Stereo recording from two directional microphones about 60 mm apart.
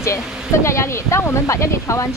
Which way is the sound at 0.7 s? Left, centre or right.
Left.